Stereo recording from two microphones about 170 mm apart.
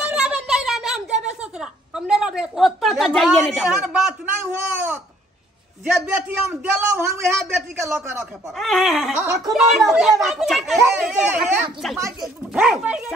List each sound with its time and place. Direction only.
0.1 s a sound: 5° right (ahead or behind)
4.7 s babbling: 10° right (ahead or behind)
5.9 s a man's voice: 10° right (ahead or behind)
8.5 s a woman's voice: centre (ahead or behind)
9.1 s a man's voice: 15° right (ahead or behind)
9.5 s a woman's voice: centre (ahead or behind)